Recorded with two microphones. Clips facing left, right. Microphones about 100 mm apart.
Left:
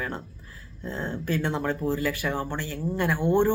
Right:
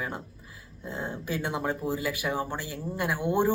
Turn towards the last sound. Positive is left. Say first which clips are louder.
# left 4 dB
turn(degrees=-10)  # may be behind; listen again after turning